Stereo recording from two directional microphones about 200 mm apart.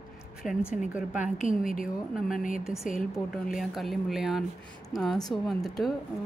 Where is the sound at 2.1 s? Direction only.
Centre (ahead or behind).